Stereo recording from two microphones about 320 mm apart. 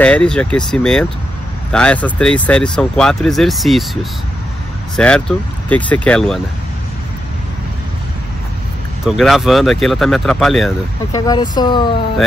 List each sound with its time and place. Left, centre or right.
0.0 s speech: centre
9.0 s speech: centre
11.1 s speech: centre